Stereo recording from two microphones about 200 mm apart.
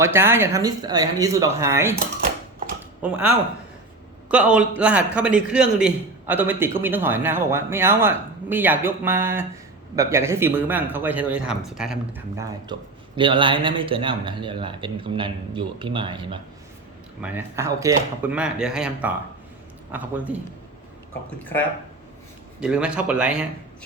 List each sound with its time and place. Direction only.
0.0 s a man's voice: 10° right (ahead or behind)
3.0 s a man's voice: 5° right (ahead or behind)
12.4 s a man's voice: 15° right (ahead or behind)
17.2 s a man's voice: 10° right (ahead or behind)
22.6 s speech: 5° right (ahead or behind)